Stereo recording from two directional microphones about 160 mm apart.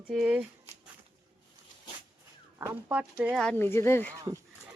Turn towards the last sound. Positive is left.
turn(degrees=15)  # may be behind; listen again after turning